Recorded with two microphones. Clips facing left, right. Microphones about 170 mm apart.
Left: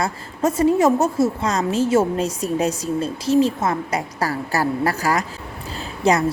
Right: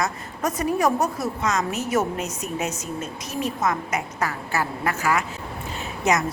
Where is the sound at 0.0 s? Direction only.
30° left (ahead or behind).